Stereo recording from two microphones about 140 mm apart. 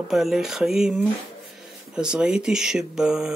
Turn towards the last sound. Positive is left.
turn(degrees=-5)  # may be behind; listen again after turning